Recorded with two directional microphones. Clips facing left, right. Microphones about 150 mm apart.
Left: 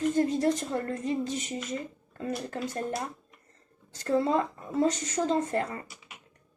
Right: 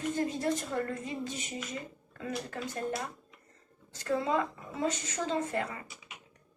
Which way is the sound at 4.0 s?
40° left (ahead or behind).